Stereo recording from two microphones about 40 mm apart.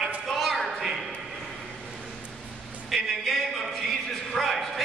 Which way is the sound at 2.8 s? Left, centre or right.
Centre.